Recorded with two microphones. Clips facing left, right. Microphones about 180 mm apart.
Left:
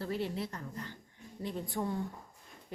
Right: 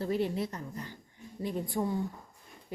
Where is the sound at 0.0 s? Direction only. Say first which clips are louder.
Right 5 dB; 15° right (ahead or behind).